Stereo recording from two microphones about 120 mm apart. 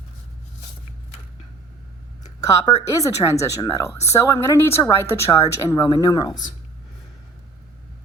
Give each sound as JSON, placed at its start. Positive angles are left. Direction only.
{"t": 2.4, "sound": "a woman's voice", "side_deg": 30}